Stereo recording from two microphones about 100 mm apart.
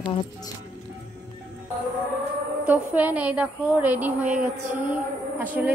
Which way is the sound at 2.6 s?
15° right (ahead or behind).